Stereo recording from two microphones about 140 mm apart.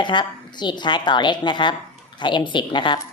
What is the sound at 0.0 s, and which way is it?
Speech, 35° left (ahead or behind).